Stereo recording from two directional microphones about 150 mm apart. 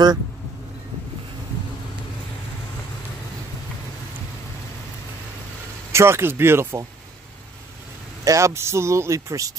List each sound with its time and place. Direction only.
5.9 s speech: 15° right (ahead or behind)
8.2 s a man's voice: 20° right (ahead or behind)